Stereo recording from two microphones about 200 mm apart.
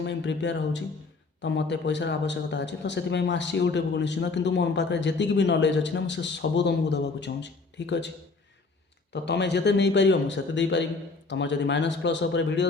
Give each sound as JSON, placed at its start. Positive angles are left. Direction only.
{"t": 0.0, "sound": "a man's voice", "side_deg": 60}
{"t": 9.2, "sound": "a man's voice", "side_deg": 60}